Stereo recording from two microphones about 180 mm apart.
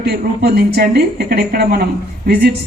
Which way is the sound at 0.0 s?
65° right (ahead or behind).